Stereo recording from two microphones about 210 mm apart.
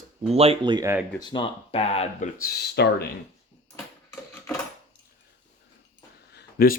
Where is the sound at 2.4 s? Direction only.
45° left (ahead or behind).